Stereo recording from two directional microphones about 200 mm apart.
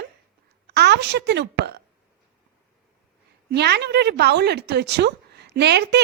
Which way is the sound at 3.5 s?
55° right (ahead or behind).